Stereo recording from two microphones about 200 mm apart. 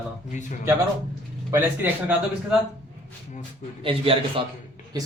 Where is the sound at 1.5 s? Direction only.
10° right (ahead or behind).